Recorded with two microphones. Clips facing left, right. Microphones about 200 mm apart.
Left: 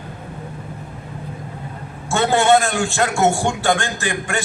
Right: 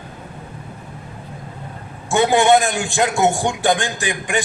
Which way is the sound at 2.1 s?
15° right (ahead or behind).